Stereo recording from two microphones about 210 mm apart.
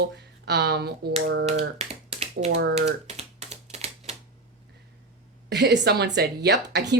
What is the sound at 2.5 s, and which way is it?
Speech, 55° right (ahead or behind).